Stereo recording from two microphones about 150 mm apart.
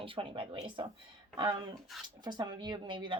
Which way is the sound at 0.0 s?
35° right (ahead or behind).